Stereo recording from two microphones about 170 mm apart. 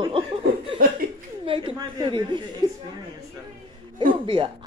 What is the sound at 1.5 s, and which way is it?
Speech, 30° right (ahead or behind).